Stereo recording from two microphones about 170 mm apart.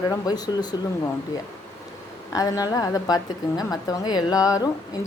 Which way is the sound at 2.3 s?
20° left (ahead or behind).